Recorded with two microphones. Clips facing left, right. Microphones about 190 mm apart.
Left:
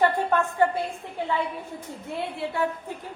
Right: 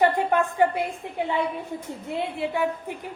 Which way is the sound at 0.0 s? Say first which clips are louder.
Right 2 dB; 15° right (ahead or behind).